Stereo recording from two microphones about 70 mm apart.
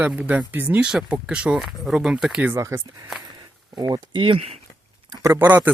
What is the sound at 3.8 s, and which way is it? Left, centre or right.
Speech, right.